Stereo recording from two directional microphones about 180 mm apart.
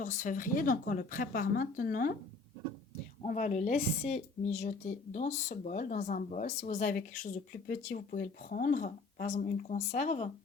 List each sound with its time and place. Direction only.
0.0 s a woman's voice: 45° left (ahead or behind)
3.2 s a woman's voice: 45° left (ahead or behind)